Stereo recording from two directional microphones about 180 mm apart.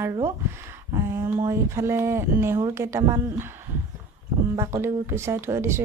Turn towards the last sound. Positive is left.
turn(degrees=-15)  # may be behind; listen again after turning